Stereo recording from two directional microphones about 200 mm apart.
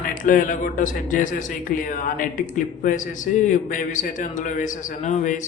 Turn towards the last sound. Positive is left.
turn(degrees=35)  # may be behind; listen again after turning